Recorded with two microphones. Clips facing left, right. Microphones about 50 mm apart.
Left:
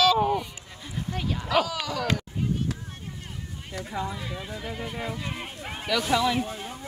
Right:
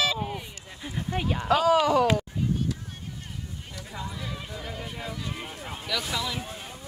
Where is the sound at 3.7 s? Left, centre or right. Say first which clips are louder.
Left 6 dB; left.